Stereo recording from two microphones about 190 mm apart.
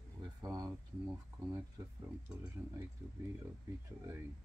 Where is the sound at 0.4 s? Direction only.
20° right (ahead or behind).